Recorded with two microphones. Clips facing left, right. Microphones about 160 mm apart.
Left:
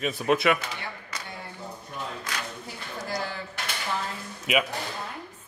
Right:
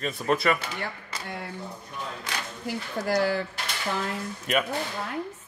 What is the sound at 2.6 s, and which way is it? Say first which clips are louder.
Speech: right 7 dB; 70° right (ahead or behind).